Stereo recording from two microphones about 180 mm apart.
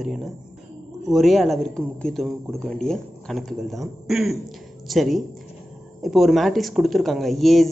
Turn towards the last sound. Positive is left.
turn(degrees=0)  # may be behind; listen again after turning